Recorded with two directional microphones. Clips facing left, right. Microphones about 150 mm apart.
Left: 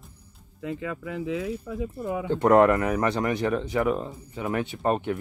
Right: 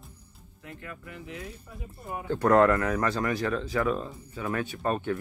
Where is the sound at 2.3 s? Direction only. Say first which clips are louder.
Left 2 dB; 20° left (ahead or behind).